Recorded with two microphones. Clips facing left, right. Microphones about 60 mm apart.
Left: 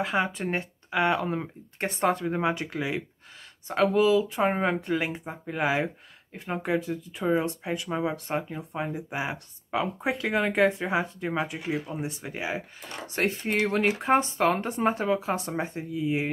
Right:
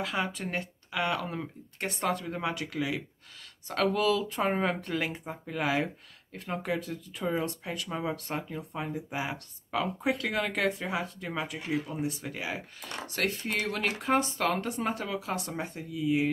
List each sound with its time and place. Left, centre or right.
0.0 s speech: left